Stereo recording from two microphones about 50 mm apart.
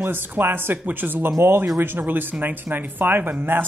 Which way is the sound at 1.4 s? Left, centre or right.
Right.